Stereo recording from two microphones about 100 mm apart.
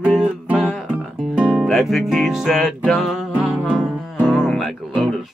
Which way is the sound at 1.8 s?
Centre (ahead or behind).